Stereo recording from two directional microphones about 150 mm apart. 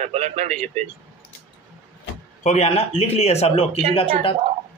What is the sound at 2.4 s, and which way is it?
Speech, 50° left (ahead or behind).